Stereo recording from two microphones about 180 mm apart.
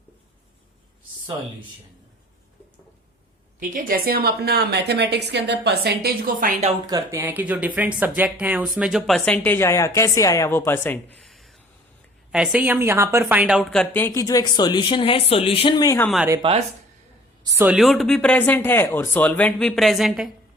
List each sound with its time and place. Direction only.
3.6 s a woman's voice: 50° right (ahead or behind)
6.8 s speech: 15° right (ahead or behind); by 11.0 s 10° left (ahead or behind)
11.2 s a sound: centre (ahead or behind)
12.3 s a woman's voice: 5° right (ahead or behind); by 16.0 s 20° left (ahead or behind)
16.0 s speech: 5° left (ahead or behind)
16.4 s speech: 35° right (ahead or behind)
17.4 s speech: 15° right (ahead or behind)